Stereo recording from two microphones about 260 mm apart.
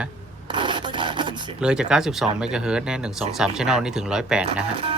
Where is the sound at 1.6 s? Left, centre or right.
Centre.